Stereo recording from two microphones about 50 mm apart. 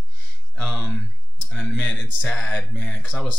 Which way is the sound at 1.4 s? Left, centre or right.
Left.